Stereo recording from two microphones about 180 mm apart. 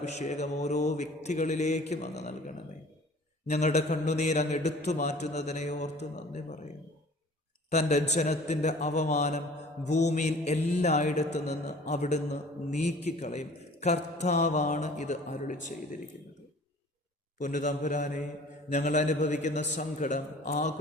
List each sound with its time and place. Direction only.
0.0 s mantra: 40° left (ahead or behind)
3.4 s mantra: 40° left (ahead or behind)
7.7 s mantra: 40° left (ahead or behind)
17.3 s a man's voice: 45° left (ahead or behind)
18.7 s mantra: 40° left (ahead or behind)